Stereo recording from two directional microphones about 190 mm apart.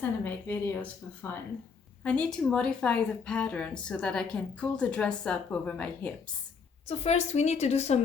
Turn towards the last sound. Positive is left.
turn(degrees=35)  # may be behind; listen again after turning